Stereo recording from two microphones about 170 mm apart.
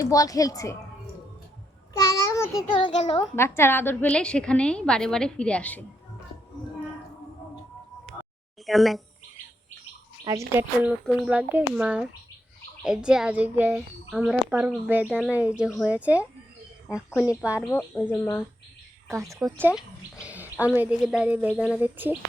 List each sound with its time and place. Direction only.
0.0 s a woman's voice: 20° left (ahead or behind)
1.9 s child singing: 15° left (ahead or behind)
3.0 s a child's voice: 35° left (ahead or behind)
3.3 s a woman's voice: 15° left (ahead or behind)
8.6 s a child's voice: centre (ahead or behind)
10.2 s a child's voice: 15° right (ahead or behind)
17.2 s speech: 10° right (ahead or behind)
17.6 s a woman's voice: 15° left (ahead or behind)
19.1 s speech: 20° right (ahead or behind)
19.5 s a sound: 10° right (ahead or behind)
20.7 s speech: 5° right (ahead or behind)